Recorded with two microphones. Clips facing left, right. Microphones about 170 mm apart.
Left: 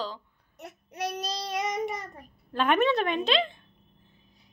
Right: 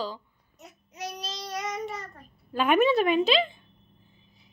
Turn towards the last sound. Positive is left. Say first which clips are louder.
# right 3 dB
turn(degrees=-5)  # may be behind; listen again after turning